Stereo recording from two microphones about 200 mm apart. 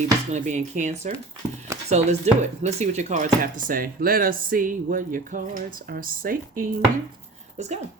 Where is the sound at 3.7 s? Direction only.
45° right (ahead or behind).